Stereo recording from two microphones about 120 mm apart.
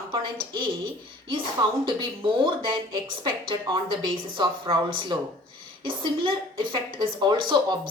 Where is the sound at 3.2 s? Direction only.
40° right (ahead or behind).